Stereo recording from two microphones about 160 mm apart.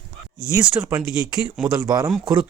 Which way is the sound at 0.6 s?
5° right (ahead or behind).